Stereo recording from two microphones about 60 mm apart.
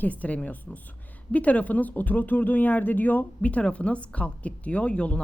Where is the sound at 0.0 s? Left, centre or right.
Left.